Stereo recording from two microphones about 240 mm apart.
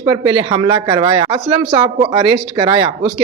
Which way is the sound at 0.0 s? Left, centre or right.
Centre.